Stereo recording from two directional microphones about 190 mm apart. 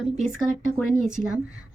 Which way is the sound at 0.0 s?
Centre (ahead or behind).